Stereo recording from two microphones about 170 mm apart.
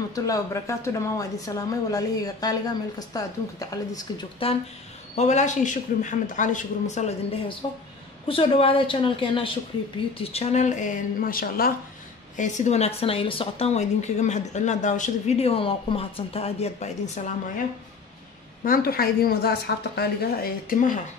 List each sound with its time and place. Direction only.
0.1 s a woman's voice: 20° left (ahead or behind)
4.4 s a man's voice: 35° left (ahead or behind); by 11.7 s 60° left (ahead or behind)
12.4 s speech: 45° left (ahead or behind)
18.6 s a woman's voice: 60° left (ahead or behind)